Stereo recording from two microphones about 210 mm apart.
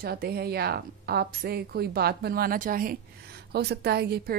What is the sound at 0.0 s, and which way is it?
A woman's voice, 45° right (ahead or behind).